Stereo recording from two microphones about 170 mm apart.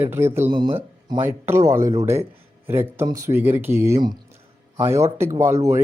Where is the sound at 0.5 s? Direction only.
25° right (ahead or behind).